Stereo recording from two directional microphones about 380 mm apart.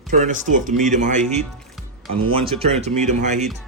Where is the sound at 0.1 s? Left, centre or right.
Centre.